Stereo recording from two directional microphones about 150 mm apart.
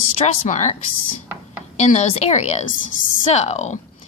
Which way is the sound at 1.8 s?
50° left (ahead or behind).